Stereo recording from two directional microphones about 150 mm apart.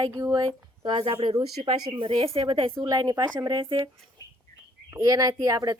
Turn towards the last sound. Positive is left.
turn(degrees=-25)  # may be behind; listen again after turning